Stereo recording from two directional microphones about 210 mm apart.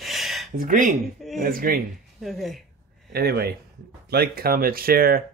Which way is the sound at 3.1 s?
50° right (ahead or behind).